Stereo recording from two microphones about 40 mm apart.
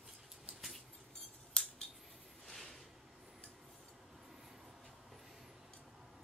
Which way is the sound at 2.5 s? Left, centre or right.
Centre.